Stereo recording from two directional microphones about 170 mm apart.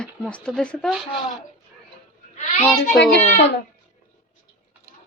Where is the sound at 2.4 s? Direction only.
45° left (ahead or behind).